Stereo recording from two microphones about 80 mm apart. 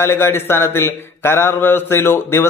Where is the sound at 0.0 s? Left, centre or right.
Left.